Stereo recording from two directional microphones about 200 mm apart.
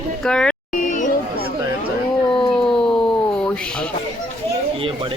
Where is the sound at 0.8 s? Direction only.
40° left (ahead or behind).